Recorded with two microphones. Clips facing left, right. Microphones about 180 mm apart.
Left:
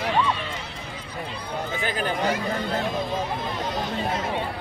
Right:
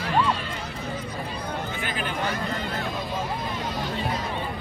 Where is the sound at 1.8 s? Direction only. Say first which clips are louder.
Left 7 dB; 40° left (ahead or behind).